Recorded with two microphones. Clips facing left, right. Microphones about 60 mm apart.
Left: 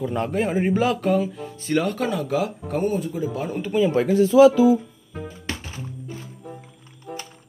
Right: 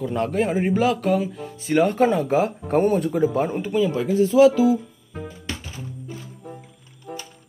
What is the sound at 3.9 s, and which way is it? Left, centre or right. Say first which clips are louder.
Speech: left 3 dB; left.